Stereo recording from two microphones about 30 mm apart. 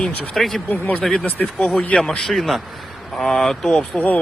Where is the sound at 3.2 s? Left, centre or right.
Centre.